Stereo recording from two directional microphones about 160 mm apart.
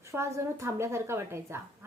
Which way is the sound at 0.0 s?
15° right (ahead or behind).